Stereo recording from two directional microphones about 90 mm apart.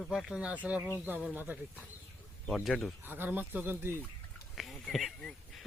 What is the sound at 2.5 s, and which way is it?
Speech, centre (ahead or behind).